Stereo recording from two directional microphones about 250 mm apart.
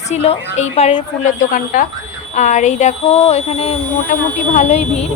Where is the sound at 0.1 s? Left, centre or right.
Left.